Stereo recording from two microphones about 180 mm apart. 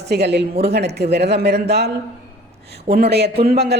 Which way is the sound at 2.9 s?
65° right (ahead or behind).